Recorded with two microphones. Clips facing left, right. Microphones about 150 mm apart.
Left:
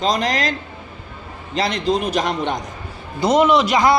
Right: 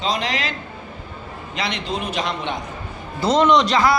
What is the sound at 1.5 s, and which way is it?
A woman's voice, 40° left (ahead or behind).